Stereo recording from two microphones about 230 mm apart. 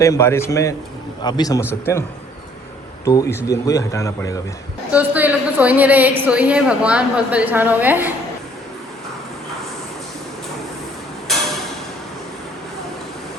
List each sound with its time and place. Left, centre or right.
0.0 s speech: centre
4.9 s a woman's voice: centre